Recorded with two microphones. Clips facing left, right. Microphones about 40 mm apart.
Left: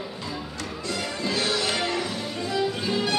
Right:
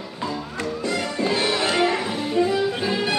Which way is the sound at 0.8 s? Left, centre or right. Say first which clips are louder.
Right 5 dB; right.